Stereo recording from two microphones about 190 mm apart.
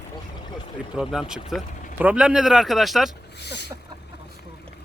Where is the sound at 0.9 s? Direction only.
5° right (ahead or behind).